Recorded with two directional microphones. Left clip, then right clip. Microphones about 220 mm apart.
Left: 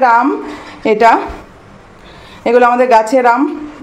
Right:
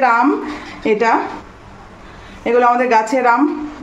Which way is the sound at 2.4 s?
20° left (ahead or behind).